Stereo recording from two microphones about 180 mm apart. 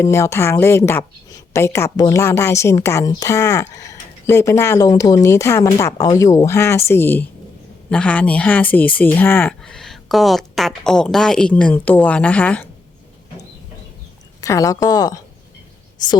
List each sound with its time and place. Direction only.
0.0 s speech: 15° left (ahead or behind)
14.4 s speech: 20° left (ahead or behind)